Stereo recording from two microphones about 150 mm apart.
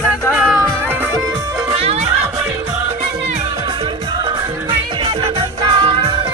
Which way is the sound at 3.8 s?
35° right (ahead or behind).